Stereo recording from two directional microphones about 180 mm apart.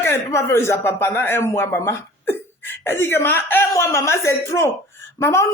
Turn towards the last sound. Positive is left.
turn(degrees=15)  # may be behind; listen again after turning